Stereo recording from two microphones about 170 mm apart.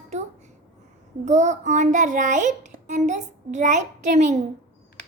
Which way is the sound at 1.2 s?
45° right (ahead or behind).